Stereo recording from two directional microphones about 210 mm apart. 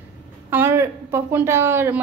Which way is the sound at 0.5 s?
10° right (ahead or behind).